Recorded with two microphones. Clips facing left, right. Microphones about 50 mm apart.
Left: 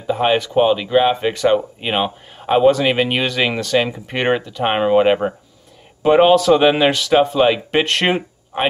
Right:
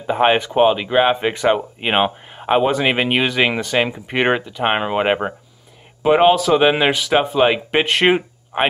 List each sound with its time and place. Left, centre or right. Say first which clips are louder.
0.0 s speech: right 1 dB; right; by 8.6 s centre